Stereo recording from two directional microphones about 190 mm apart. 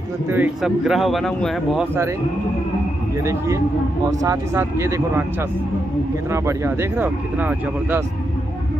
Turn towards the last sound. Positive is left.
turn(degrees=-10)  # may be behind; listen again after turning